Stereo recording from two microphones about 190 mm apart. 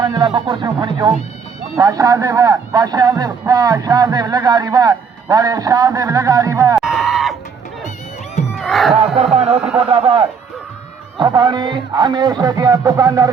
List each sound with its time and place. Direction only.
0.0 s speech: 25° right (ahead or behind)
6.7 s a sound: centre (ahead or behind)
8.5 s crowd: centre (ahead or behind)
9.0 s speech: 35° right (ahead or behind)
9.6 s speech: 5° right (ahead or behind)
11.2 s speech: 20° right (ahead or behind)